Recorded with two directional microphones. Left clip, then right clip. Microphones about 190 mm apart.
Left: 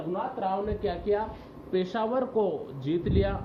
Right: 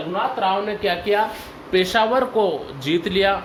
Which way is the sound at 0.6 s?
60° right (ahead or behind).